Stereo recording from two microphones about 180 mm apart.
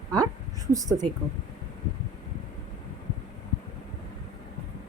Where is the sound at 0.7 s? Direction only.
20° right (ahead or behind).